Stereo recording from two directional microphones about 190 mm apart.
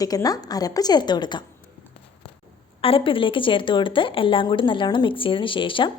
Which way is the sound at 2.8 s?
30° left (ahead or behind).